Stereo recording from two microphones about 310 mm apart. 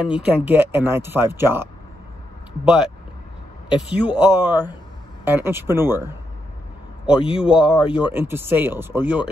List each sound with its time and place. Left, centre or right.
0.1 s a man's voice: centre
4.2 s a man's voice: centre